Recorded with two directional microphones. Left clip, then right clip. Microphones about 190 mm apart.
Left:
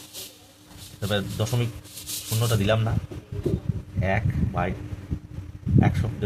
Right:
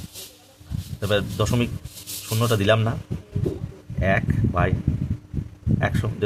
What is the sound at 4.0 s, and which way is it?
Speech, 45° right (ahead or behind).